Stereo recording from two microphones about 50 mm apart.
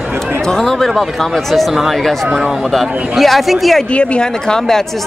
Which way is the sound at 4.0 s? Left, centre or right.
Centre.